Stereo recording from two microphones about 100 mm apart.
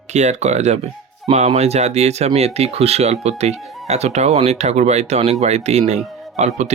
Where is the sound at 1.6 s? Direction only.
90° right.